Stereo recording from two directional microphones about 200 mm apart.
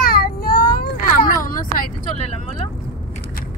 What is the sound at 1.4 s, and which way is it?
Vehicle, 45° left (ahead or behind).